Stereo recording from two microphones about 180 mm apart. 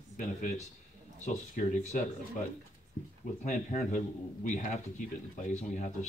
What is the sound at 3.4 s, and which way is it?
Speech, 40° left (ahead or behind).